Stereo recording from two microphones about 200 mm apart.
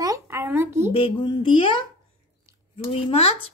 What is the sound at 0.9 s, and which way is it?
Speech, 25° left (ahead or behind).